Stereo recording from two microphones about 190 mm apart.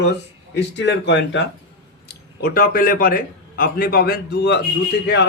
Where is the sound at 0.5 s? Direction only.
65° left (ahead or behind).